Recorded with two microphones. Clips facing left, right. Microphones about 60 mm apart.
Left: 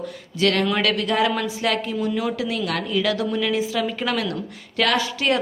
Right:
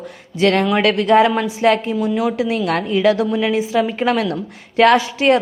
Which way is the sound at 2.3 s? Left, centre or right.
Right.